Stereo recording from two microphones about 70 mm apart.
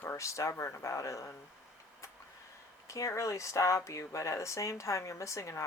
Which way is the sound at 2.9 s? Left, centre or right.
Left.